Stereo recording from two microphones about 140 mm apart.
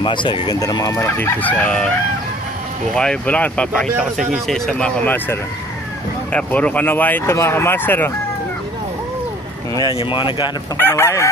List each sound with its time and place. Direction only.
0.0 s speech: 35° left (ahead or behind); by 1.9 s 10° left (ahead or behind)
3.0 s speech: 10° left (ahead or behind)
9.8 s speech: 35° left (ahead or behind)
10.8 s speech: 15° left (ahead or behind)